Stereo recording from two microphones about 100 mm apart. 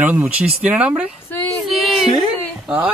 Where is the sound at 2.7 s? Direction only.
15° right (ahead or behind).